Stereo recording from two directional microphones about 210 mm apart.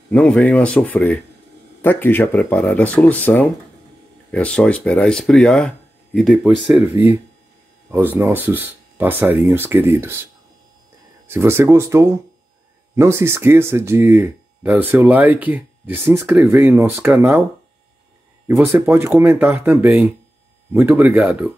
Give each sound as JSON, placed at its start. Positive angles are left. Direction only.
{"t": 0.1, "sound": "speech", "side_deg": 5}
{"t": 11.2, "sound": "speech", "side_deg": -10}
{"t": 18.6, "sound": "speech", "side_deg": -10}